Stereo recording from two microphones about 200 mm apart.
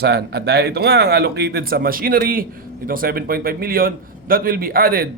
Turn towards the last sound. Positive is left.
turn(degrees=-45)  # may be behind; listen again after turning